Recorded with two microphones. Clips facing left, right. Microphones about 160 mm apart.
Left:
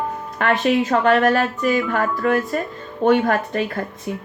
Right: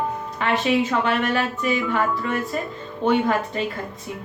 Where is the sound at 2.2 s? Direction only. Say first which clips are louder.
Left 6 dB; 55° left (ahead or behind).